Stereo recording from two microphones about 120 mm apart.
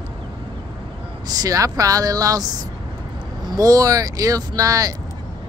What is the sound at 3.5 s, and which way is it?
Speech, 30° right (ahead or behind).